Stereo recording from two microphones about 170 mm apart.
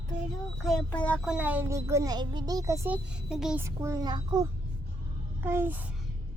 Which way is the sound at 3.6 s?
15° right (ahead or behind).